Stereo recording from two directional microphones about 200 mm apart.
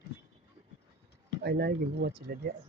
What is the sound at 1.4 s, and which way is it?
Speech, 55° right (ahead or behind).